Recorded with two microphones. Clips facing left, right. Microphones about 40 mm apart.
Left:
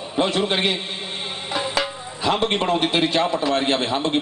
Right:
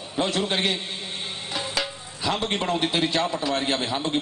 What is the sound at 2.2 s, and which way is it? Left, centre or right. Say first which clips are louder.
A man's voice: left 5 dB; left.